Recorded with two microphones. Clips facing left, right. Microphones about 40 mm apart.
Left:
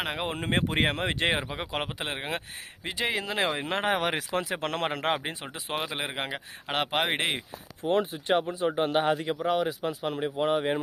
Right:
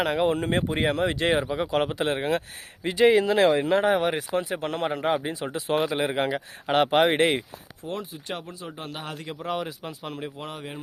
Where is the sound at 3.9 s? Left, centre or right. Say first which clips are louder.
Right 4 dB; left.